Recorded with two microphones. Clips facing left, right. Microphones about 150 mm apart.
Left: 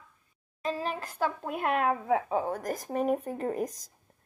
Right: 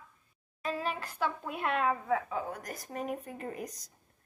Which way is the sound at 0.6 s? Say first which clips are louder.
Left 2 dB; 35° left (ahead or behind).